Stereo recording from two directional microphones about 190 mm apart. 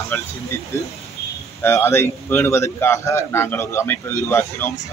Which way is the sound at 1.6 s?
10° left (ahead or behind).